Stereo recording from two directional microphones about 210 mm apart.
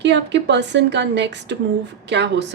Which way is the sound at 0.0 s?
55° right (ahead or behind).